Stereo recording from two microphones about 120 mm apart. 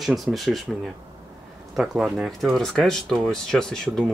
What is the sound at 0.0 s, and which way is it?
Speech, centre (ahead or behind).